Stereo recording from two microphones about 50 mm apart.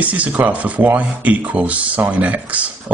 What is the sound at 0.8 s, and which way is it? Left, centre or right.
Speech, right.